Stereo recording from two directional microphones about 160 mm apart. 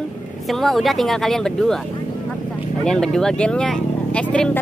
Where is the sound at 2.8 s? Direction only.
5° left (ahead or behind).